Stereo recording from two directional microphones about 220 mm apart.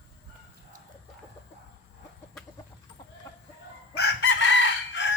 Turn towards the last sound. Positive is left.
turn(degrees=55)  # may be behind; listen again after turning